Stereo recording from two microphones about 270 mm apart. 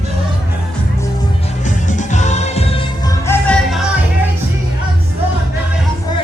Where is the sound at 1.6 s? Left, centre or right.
Left.